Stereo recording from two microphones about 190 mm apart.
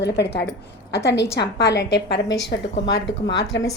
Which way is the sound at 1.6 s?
60° left (ahead or behind).